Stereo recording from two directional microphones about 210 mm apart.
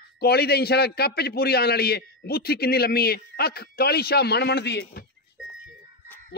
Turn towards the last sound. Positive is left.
turn(degrees=50)  # may be behind; listen again after turning